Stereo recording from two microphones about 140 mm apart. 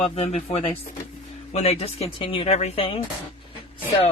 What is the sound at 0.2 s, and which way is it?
Speech, 50° left (ahead or behind).